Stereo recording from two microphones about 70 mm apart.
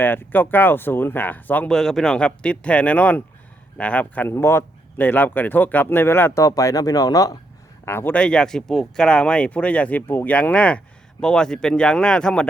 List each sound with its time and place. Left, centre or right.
0.0 s speech: left
1.7 s speech: centre
4.3 s speech: left
4.9 s speech: left
6.3 s speech: left
7.9 s speech: left
8.1 s speech: centre